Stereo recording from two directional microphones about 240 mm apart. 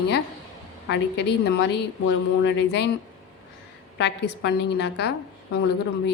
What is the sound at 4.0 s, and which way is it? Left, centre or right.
A woman's voice, left.